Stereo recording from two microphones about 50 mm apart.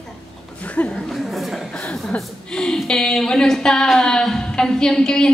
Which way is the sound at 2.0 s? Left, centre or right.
Centre.